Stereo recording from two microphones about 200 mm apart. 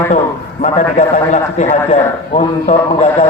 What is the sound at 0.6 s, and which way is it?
A man's voice, 35° left (ahead or behind).